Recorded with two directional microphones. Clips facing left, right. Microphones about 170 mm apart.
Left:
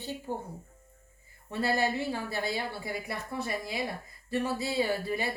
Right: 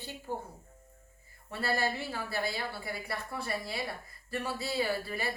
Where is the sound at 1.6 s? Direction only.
20° left (ahead or behind).